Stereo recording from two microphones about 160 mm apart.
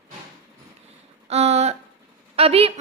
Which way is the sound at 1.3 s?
40° right (ahead or behind).